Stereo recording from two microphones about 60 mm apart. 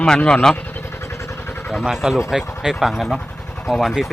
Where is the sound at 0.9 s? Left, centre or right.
Left.